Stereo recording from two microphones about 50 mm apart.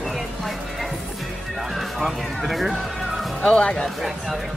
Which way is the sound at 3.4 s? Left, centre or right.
Left.